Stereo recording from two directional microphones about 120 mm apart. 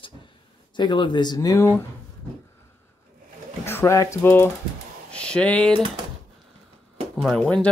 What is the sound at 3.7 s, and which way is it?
Speech, 25° left (ahead or behind).